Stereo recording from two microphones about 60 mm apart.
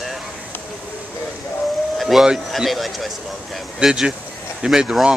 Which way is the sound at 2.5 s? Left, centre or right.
Centre.